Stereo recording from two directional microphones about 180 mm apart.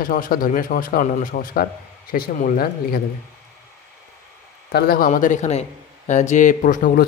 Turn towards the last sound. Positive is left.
turn(degrees=50)  # may be behind; listen again after turning